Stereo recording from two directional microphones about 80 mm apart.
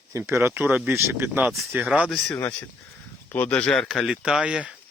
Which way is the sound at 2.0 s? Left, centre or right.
Centre.